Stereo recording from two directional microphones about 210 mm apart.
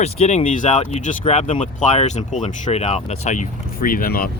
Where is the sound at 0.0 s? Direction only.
30° left (ahead or behind).